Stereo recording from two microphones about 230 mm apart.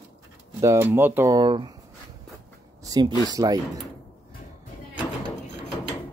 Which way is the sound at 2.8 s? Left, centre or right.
Centre.